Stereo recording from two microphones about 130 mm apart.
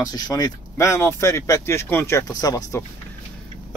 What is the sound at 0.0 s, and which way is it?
Speech, 30° left (ahead or behind).